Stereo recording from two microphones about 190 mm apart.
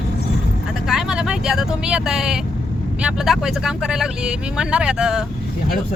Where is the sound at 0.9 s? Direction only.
5° right (ahead or behind).